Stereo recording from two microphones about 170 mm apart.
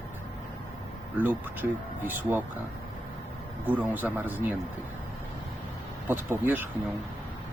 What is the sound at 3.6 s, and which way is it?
Speech, 10° right (ahead or behind).